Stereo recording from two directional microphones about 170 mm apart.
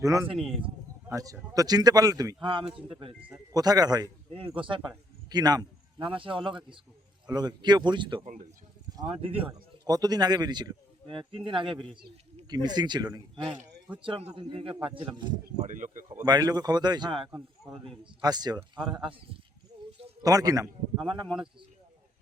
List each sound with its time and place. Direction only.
0.0 s speech: 20° right (ahead or behind)
3.1 s speech: 5° right (ahead or behind)
3.5 s a man's voice: 20° right (ahead or behind)
14.0 s speech: 35° right (ahead or behind)
15.6 s speech: 50° right (ahead or behind)
16.2 s speech: 25° right (ahead or behind)
20.2 s speech: 20° right (ahead or behind)
21.2 s speech: 5° right (ahead or behind)